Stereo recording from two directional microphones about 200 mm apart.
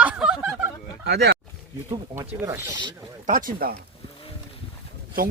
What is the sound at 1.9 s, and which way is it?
Speech, 15° right (ahead or behind).